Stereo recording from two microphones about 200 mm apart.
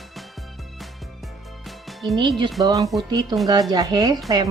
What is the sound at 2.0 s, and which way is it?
Speech, 20° right (ahead or behind).